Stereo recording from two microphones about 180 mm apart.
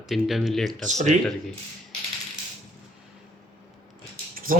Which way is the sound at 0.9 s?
40° right (ahead or behind).